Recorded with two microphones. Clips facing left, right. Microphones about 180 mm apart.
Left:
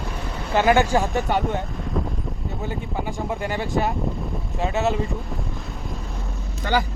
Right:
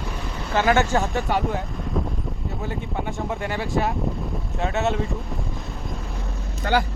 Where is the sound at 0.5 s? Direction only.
15° left (ahead or behind).